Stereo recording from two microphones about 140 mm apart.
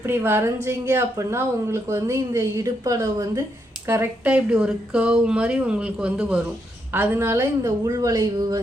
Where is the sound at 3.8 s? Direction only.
15° right (ahead or behind).